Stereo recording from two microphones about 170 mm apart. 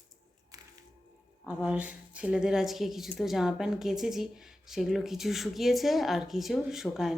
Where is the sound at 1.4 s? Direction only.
5° right (ahead or behind).